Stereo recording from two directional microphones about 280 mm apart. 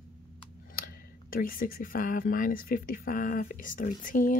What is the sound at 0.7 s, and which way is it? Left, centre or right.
Speech, left.